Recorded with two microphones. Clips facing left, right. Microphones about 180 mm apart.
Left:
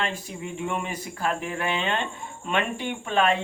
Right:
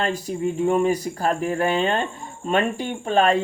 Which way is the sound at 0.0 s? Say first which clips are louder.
Right 7 dB; 40° right (ahead or behind).